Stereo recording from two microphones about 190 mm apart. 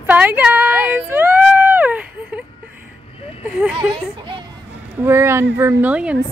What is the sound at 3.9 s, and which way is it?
Speech, 25° right (ahead or behind).